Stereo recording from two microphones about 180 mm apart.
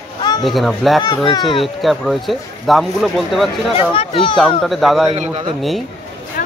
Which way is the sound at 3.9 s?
30° left (ahead or behind).